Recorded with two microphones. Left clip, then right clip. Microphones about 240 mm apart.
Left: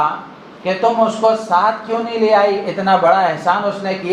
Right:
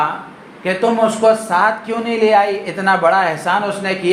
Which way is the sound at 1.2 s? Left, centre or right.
Right.